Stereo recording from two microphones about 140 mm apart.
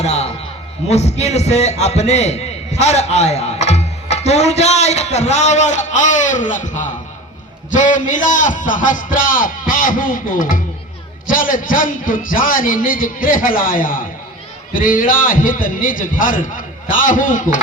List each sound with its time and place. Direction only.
0.0 s a man's voice: 50° left (ahead or behind); by 17.6 s 70° left (ahead or behind)